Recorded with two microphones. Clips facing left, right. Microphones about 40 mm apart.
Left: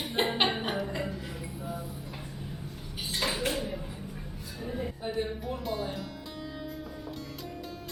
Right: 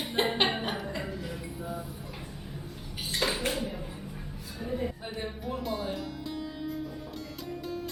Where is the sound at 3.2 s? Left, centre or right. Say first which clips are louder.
Right 1 dB; centre.